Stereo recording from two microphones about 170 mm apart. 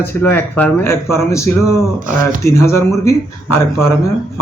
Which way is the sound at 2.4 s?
15° left (ahead or behind).